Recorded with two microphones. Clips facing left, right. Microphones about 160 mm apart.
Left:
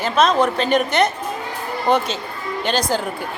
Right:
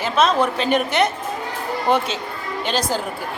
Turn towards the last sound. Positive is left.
turn(degrees=-5)  # may be behind; listen again after turning